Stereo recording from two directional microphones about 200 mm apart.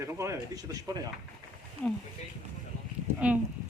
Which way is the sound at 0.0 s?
15° right (ahead or behind).